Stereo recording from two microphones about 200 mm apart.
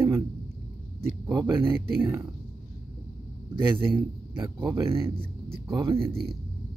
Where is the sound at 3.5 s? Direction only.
25° right (ahead or behind).